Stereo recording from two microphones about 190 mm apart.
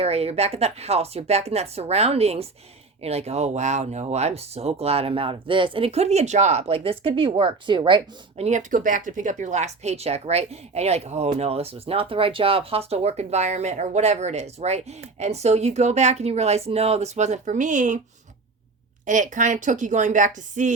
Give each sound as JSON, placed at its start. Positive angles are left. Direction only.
{"t": 0.0, "sound": "speech", "side_deg": -30}
{"t": 8.4, "sound": "speech", "side_deg": -40}
{"t": 19.0, "sound": "speech", "side_deg": -40}